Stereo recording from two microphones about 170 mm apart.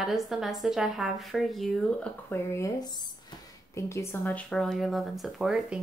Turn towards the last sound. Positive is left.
turn(degrees=0)  # may be behind; listen again after turning